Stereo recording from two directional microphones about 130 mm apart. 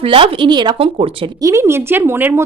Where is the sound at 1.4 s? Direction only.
25° right (ahead or behind).